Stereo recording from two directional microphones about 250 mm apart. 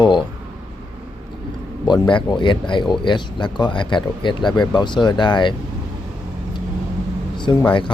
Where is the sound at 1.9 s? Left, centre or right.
Centre.